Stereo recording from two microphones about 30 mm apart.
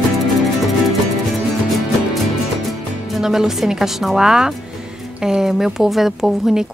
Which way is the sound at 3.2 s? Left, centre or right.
Centre.